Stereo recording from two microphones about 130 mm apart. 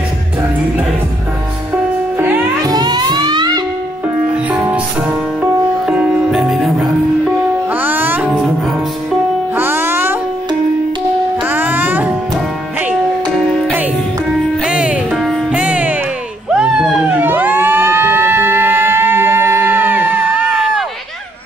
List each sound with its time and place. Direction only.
2.1 s music: 15° right (ahead or behind)
2.6 s music: 30° right (ahead or behind)
4.5 s music: 10° right (ahead or behind)
7.7 s music: 15° right (ahead or behind)
9.6 s music: 15° right (ahead or behind)
11.4 s music: 15° right (ahead or behind)
14.6 s music: 10° right (ahead or behind)
16.5 s a sound: 10° right (ahead or behind)